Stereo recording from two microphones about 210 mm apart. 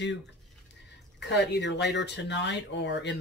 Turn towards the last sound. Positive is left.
turn(degrees=55)  # may be behind; listen again after turning